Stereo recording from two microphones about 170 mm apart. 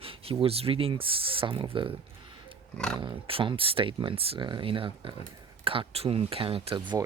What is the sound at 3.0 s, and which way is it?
Speech, 30° right (ahead or behind).